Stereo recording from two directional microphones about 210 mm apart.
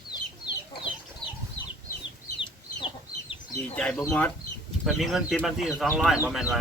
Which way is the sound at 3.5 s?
5° left (ahead or behind).